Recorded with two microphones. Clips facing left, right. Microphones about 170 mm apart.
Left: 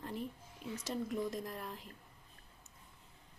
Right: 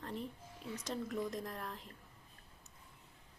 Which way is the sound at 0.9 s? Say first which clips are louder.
Left 2 dB; centre (ahead or behind).